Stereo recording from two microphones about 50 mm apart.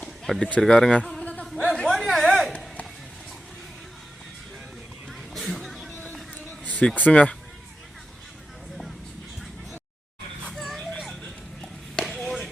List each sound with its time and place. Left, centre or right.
0.3 s speech: left
0.6 s speech: centre
1.2 s a sound: left
1.5 s chatter: centre
1.9 s a sound: centre
5.3 s vehicle: centre
6.7 s speech: left
10.5 s a sound: centre
12.0 s chop: centre